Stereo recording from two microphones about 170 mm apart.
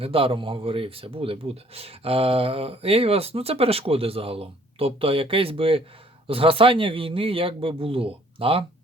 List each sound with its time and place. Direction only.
0.0 s speech: 35° right (ahead or behind)